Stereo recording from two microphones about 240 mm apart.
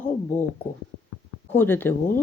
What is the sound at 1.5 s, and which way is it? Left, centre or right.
Speech, centre.